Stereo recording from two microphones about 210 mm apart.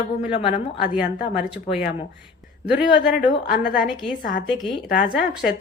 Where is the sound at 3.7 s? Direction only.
Centre (ahead or behind).